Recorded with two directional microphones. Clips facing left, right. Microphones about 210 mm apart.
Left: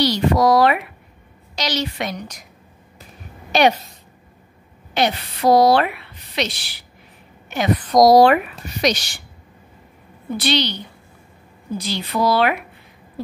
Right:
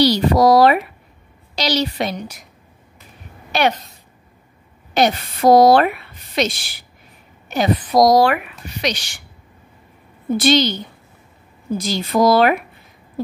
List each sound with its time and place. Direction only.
0.0 s a woman's voice: 35° right (ahead or behind)
3.5 s speech: 15° left (ahead or behind)
4.9 s a woman's voice: 45° right (ahead or behind)
7.4 s a sound: 35° right (ahead or behind)
7.9 s speech: 5° right (ahead or behind)
8.4 s a woman's voice: 40° left (ahead or behind)
10.3 s a woman's voice: 45° right (ahead or behind)